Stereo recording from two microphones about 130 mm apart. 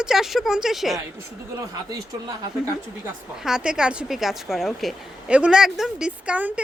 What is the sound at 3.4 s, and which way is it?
A woman's voice, 5° right (ahead or behind).